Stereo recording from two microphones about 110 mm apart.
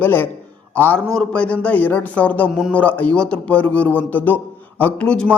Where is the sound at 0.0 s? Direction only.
15° left (ahead or behind).